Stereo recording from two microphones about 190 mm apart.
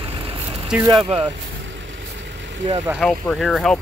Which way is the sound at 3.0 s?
Centre (ahead or behind).